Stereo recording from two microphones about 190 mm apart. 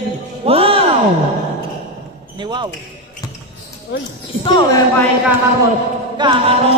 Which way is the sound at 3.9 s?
70° left (ahead or behind).